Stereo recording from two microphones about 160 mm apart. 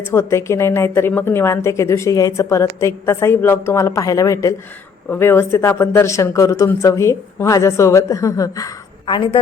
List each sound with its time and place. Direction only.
0.1 s a woman's voice: 15° left (ahead or behind)